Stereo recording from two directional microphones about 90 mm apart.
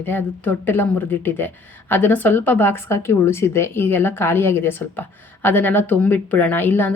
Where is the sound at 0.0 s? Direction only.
25° left (ahead or behind).